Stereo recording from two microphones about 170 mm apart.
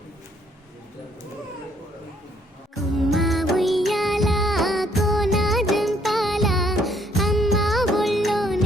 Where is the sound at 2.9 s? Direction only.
Centre (ahead or behind).